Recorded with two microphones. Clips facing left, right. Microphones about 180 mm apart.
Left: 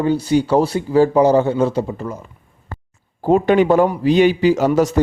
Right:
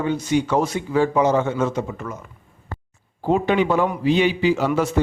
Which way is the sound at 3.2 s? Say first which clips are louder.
Left 5 dB; 45° left (ahead or behind).